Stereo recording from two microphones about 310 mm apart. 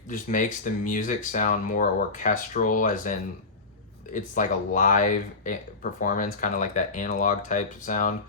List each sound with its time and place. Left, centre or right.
0.1 s speech: left